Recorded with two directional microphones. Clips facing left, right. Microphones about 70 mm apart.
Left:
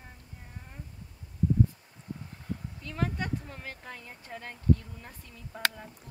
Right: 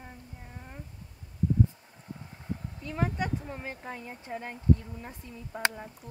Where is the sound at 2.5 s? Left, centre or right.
Centre.